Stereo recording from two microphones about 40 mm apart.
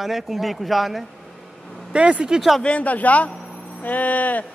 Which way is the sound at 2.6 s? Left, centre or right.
Left.